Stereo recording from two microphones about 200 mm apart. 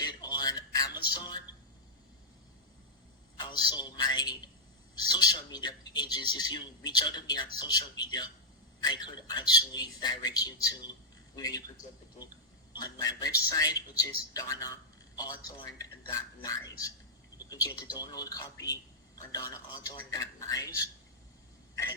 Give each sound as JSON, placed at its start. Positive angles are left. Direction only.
{"t": 0.0, "sound": "a sound", "side_deg": 20}
{"t": 3.3, "sound": "a man's voice", "side_deg": 20}
{"t": 12.7, "sound": "a man's voice", "side_deg": 20}